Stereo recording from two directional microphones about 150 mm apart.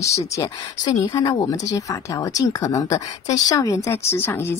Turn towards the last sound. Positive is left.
turn(degrees=15)  # may be behind; listen again after turning